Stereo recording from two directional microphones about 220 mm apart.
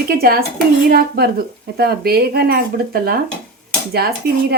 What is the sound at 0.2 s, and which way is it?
A woman's voice, 45° right (ahead or behind).